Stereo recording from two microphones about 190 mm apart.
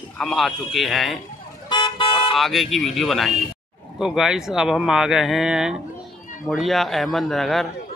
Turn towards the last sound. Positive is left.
turn(degrees=0)  # may be behind; listen again after turning